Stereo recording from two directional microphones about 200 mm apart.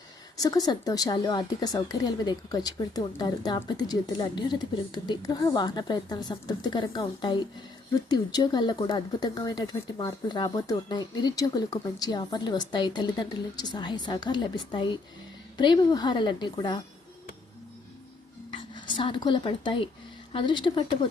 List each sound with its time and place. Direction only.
0.3 s a woman's voice: 15° left (ahead or behind)
18.5 s a woman's voice: 25° left (ahead or behind)